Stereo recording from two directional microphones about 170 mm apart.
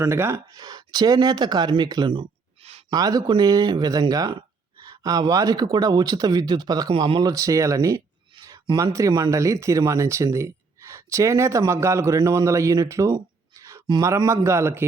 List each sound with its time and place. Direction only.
0.0 s speech: 15° right (ahead or behind)